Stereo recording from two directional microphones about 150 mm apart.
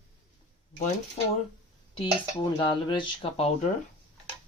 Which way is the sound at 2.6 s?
30° left (ahead or behind).